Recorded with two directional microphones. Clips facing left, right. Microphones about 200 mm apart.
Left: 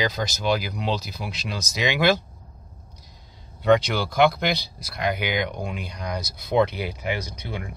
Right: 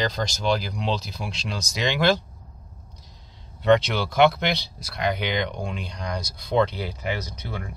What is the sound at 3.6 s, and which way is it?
Speech, centre (ahead or behind).